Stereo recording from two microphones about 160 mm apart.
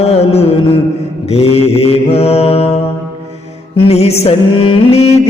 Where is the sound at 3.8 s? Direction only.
40° left (ahead or behind).